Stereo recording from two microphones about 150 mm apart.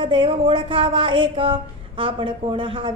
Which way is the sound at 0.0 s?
35° right (ahead or behind).